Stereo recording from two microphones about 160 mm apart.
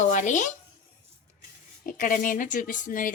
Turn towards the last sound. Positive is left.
turn(degrees=55)  # may be behind; listen again after turning